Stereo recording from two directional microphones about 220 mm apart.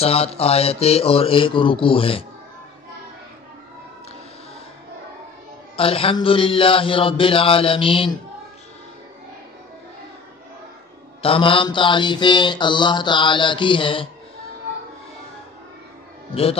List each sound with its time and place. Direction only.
0.0 s mantra: 25° left (ahead or behind)
5.8 s mantra: 25° left (ahead or behind)
11.2 s mantra: 25° left (ahead or behind)